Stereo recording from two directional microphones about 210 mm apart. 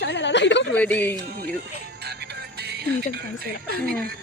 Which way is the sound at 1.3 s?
45° right (ahead or behind).